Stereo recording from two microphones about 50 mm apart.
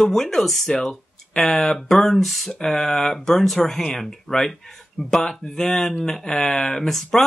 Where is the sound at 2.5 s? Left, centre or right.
Centre.